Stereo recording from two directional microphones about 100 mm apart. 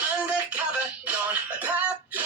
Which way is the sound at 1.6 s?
15° right (ahead or behind).